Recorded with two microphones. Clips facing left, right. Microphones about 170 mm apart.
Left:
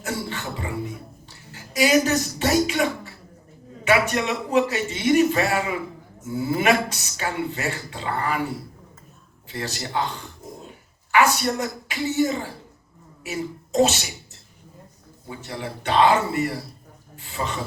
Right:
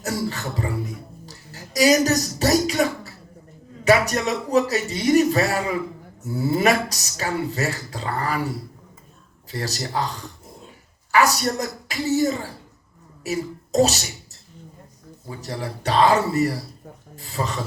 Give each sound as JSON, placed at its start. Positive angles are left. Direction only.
{"t": 0.0, "sound": "speech", "side_deg": -40}
{"t": 15.3, "sound": "speech", "side_deg": -40}